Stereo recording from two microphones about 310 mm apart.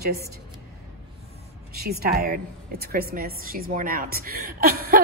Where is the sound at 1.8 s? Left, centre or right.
Right.